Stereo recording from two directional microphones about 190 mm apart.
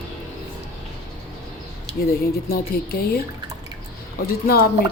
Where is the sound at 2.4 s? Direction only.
50° left (ahead or behind).